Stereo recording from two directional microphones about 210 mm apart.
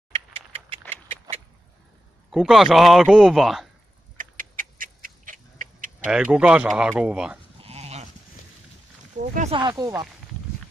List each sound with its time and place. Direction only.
0.1 s a sound: 25° right (ahead or behind)
2.3 s a man's voice: centre (ahead or behind)
4.2 s dog: 40° right (ahead or behind)
6.0 s a man's voice: 5° right (ahead or behind)
7.6 s goat: 30° right (ahead or behind)
9.3 s speech: 35° right (ahead or behind)
9.6 s speech: 20° right (ahead or behind)